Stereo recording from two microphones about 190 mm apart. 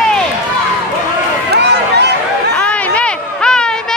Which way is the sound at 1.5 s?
60° right (ahead or behind).